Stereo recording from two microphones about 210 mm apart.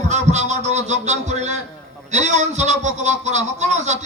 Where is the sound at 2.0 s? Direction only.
35° right (ahead or behind).